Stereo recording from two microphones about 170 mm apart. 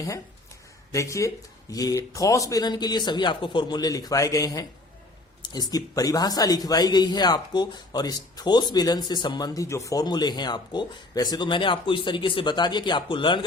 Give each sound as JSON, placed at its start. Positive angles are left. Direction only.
{"t": 0.9, "sound": "speech", "side_deg": 20}